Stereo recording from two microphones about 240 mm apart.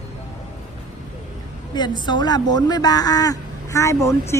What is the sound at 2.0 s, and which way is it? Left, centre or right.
A man's voice, centre.